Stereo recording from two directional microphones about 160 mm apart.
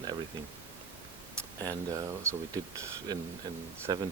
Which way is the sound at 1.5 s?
20° right (ahead or behind).